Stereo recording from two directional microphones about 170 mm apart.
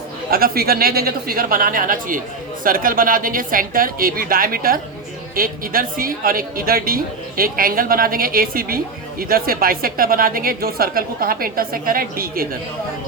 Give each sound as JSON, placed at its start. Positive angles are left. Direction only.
{"t": 0.3, "sound": "a woman's voice", "side_deg": -60}